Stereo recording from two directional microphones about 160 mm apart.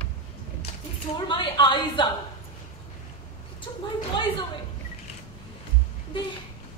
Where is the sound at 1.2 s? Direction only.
30° left (ahead or behind).